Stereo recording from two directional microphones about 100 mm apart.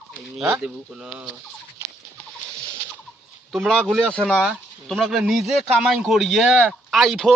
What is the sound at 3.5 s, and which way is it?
A man's voice, centre (ahead or behind).